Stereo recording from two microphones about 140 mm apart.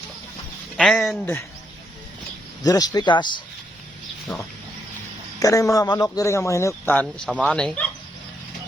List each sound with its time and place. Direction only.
0.8 s speech: centre (ahead or behind)
1.2 s speech: 15° left (ahead or behind)
2.6 s speech: 25° left (ahead or behind)
5.4 s a man's voice: 25° left (ahead or behind); by 7.9 s 5° left (ahead or behind)